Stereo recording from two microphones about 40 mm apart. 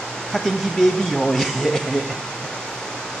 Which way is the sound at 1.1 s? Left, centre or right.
Centre.